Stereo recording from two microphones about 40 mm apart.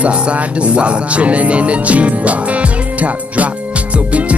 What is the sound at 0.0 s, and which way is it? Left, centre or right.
Music, right.